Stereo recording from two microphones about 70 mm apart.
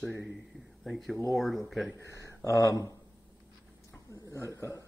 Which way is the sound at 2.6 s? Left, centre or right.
Left.